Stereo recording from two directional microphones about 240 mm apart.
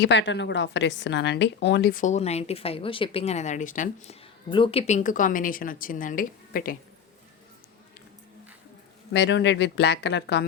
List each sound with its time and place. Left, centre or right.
0.0 s a woman's voice: left
9.1 s speech: left